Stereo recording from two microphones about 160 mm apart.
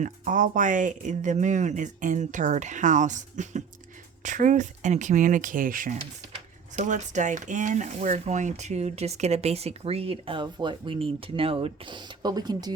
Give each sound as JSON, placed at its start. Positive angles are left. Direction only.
{"t": 0.0, "sound": "speech", "side_deg": -55}